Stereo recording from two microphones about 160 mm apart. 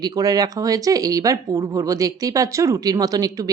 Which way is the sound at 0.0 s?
25° right (ahead or behind).